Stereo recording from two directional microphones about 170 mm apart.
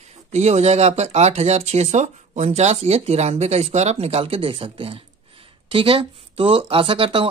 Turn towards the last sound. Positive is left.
turn(degrees=-35)  # may be behind; listen again after turning